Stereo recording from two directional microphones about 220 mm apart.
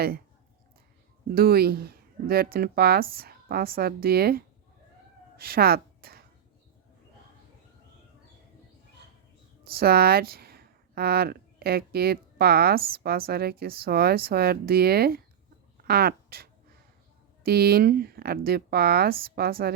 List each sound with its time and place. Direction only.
1.4 s a woman's voice: 45° right (ahead or behind)
9.7 s speech: 45° right (ahead or behind)